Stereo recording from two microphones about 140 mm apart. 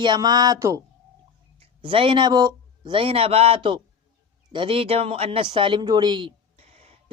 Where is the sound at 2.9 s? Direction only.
40° right (ahead or behind).